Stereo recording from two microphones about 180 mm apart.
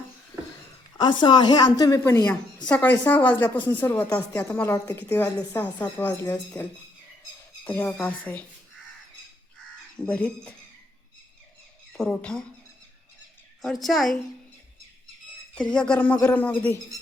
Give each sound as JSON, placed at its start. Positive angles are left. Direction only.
{"t": 0.9, "sound": "a woman's voice", "side_deg": 25}
{"t": 7.6, "sound": "speech", "side_deg": 10}
{"t": 10.0, "sound": "speech", "side_deg": 5}
{"t": 11.9, "sound": "a woman's voice", "side_deg": 5}
{"t": 13.6, "sound": "a woman's voice", "side_deg": 0}
{"t": 15.7, "sound": "speech", "side_deg": 5}